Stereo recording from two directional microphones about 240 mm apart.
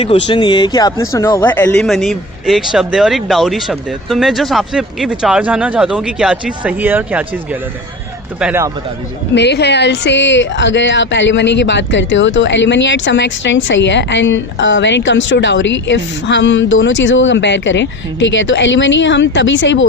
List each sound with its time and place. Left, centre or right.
0.0 s speech: left; by 7.3 s centre
8.4 s a man's voice: centre
9.3 s speech: left